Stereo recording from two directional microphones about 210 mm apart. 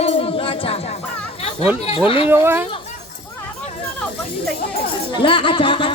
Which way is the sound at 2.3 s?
10° right (ahead or behind).